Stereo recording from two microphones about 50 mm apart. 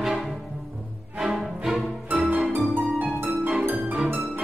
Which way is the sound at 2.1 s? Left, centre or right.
Right.